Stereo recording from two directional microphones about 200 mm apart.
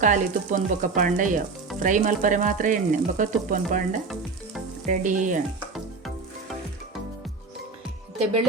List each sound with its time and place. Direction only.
0.0 s frying: 40° right (ahead or behind)
4.9 s frying: 40° right (ahead or behind)